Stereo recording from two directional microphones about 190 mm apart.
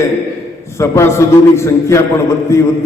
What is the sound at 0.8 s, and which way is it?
A man's voice, 15° left (ahead or behind).